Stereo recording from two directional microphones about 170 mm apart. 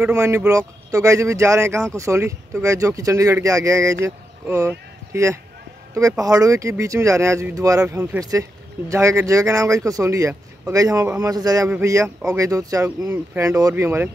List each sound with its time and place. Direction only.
0.1 s speech: 15° right (ahead or behind)